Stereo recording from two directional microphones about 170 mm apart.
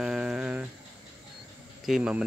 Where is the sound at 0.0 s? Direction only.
5° right (ahead or behind).